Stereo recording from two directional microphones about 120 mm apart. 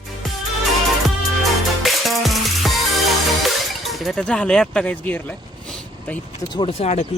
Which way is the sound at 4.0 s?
5° left (ahead or behind).